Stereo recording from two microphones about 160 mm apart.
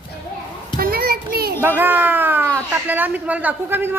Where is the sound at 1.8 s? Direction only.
10° right (ahead or behind).